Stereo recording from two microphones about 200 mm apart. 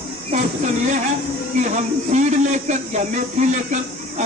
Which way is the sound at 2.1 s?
35° right (ahead or behind).